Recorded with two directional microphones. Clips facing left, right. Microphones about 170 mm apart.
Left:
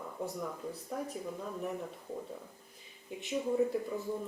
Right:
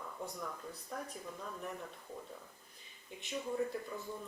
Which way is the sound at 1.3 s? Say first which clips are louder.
Left 6 dB; 15° left (ahead or behind).